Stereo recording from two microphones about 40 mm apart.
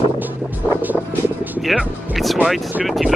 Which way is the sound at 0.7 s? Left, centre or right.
Right.